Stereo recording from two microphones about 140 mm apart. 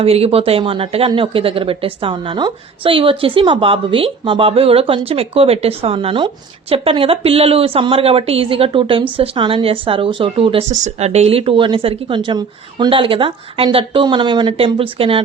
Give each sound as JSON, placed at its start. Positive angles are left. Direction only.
{"t": 0.0, "sound": "speech", "side_deg": -45}
{"t": 10.7, "sound": "speech", "side_deg": -55}